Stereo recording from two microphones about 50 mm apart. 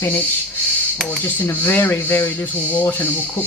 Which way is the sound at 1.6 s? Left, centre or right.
Left.